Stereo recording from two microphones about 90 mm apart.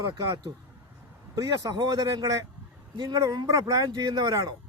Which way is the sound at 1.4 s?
40° right (ahead or behind).